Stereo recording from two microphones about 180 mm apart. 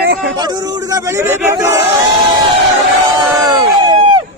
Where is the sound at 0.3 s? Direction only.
20° right (ahead or behind).